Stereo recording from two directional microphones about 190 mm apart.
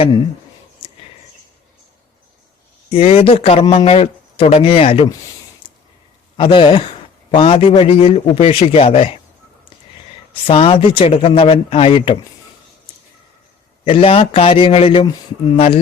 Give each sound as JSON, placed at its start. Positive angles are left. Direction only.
{"t": 2.9, "sound": "speech", "side_deg": 30}
{"t": 5.6, "sound": "a sound", "side_deg": 25}
{"t": 6.3, "sound": "a man's voice", "side_deg": 25}
{"t": 10.4, "sound": "a man's voice", "side_deg": 30}
{"t": 13.8, "sound": "a man's voice", "side_deg": 30}